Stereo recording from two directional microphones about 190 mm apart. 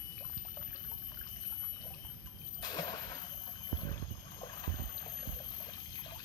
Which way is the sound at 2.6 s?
20° left (ahead or behind).